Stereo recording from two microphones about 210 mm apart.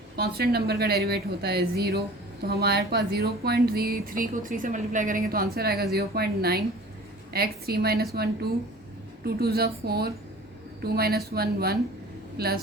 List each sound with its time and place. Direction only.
0.2 s speech: 50° right (ahead or behind)
9.2 s speech: 50° right (ahead or behind)